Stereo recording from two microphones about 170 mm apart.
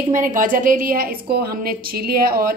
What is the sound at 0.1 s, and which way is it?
A woman's voice, 50° right (ahead or behind).